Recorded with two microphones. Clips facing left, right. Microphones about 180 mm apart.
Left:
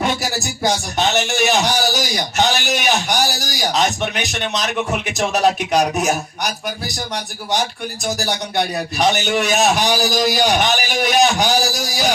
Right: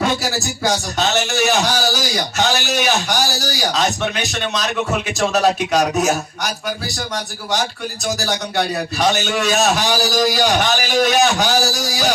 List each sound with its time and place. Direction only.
0.0 s a man's voice: 20° left (ahead or behind)
8.0 s a man's voice: 15° left (ahead or behind)